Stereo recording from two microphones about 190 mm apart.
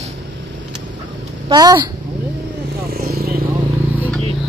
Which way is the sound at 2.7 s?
55° right (ahead or behind).